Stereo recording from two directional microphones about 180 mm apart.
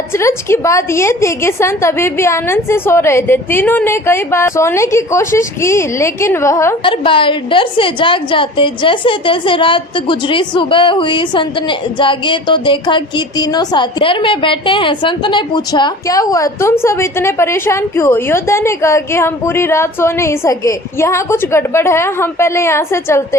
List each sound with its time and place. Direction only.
0.2 s a woman's voice: 15° left (ahead or behind)
6.8 s a woman's voice: 30° left (ahead or behind)